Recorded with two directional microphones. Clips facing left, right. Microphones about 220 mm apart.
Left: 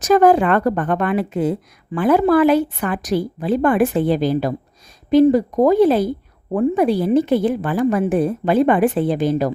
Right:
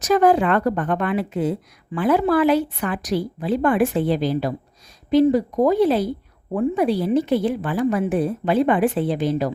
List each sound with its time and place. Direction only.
0.0 s a woman's voice: 50° left (ahead or behind)